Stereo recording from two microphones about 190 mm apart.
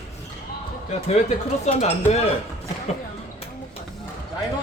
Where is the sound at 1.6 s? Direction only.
35° left (ahead or behind).